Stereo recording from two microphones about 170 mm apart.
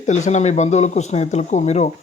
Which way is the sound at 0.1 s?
45° left (ahead or behind).